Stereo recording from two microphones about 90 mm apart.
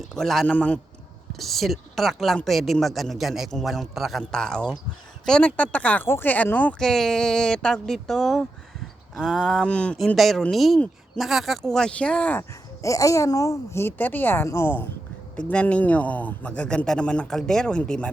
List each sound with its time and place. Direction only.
0.0 s speech: 5° left (ahead or behind)
0.4 s speech: 15° left (ahead or behind)
1.3 s speech: centre (ahead or behind); by 6.7 s 15° left (ahead or behind)
6.7 s speech: 5° left (ahead or behind)
9.6 s speech: 10° left (ahead or behind)
10.2 s speech: centre (ahead or behind)
12.4 s speech: 35° left (ahead or behind)
15.4 s speech: 15° left (ahead or behind)